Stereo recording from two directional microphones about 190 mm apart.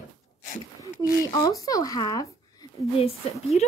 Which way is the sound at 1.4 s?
20° left (ahead or behind).